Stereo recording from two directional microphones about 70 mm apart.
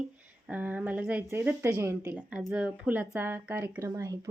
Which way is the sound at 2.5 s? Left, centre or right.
Centre.